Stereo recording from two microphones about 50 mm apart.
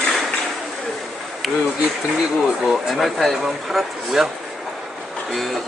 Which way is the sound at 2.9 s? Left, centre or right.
Centre.